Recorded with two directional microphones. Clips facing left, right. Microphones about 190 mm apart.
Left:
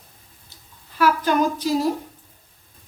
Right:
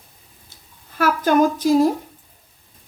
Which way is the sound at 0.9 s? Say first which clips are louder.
Right 2 dB; 45° right (ahead or behind).